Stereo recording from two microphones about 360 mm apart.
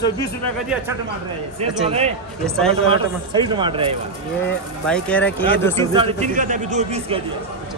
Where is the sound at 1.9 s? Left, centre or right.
Centre.